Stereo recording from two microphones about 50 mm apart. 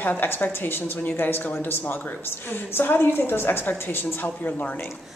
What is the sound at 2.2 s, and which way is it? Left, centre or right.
A woman's voice, left.